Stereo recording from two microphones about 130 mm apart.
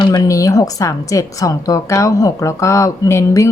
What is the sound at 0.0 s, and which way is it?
A woman's voice, 25° left (ahead or behind).